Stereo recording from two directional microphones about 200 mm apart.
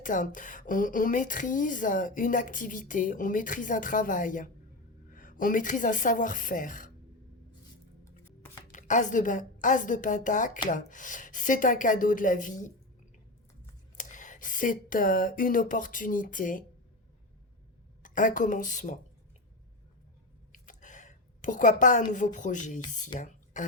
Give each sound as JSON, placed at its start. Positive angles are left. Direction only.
{"t": 0.0, "sound": "speech", "side_deg": 40}
{"t": 8.2, "sound": "chopping", "side_deg": 10}
{"t": 8.7, "sound": "speech", "side_deg": 40}
{"t": 13.9, "sound": "speech", "side_deg": 40}
{"t": 18.0, "sound": "speech", "side_deg": 40}
{"t": 20.5, "sound": "a sound", "side_deg": 40}
{"t": 22.1, "sound": "speech", "side_deg": 40}
{"t": 23.1, "sound": "a sound", "side_deg": 40}